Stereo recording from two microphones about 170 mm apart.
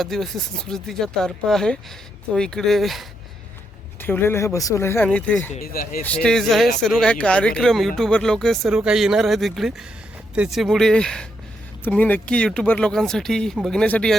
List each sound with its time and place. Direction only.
0.0 s speech: centre (ahead or behind)
4.0 s speech: 10° left (ahead or behind)
5.6 s speech: 60° left (ahead or behind)
6.0 s speech: 5° left (ahead or behind)